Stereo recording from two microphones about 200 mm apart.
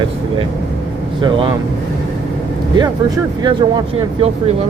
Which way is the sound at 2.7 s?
20° right (ahead or behind).